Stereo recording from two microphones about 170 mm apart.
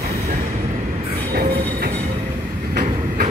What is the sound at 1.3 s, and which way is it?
Train, 65° right (ahead or behind).